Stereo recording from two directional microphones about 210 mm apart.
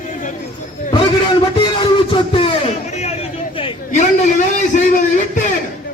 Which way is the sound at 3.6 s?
35° left (ahead or behind).